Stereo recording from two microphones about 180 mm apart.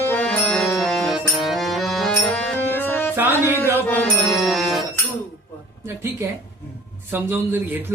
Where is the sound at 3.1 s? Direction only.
10° right (ahead or behind).